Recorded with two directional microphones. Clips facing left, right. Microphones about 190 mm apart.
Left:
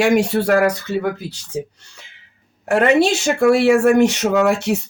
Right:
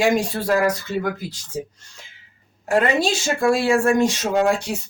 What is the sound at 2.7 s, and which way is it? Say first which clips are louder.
Speech: left 5 dB; 65° left (ahead or behind).